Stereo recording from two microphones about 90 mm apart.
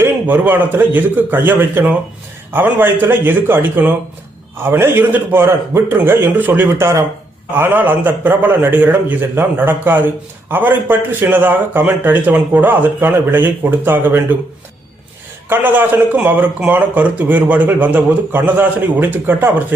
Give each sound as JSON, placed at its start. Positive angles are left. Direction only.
{"t": 0.0, "sound": "a man's voice", "side_deg": -20}
{"t": 15.4, "sound": "a man's voice", "side_deg": -25}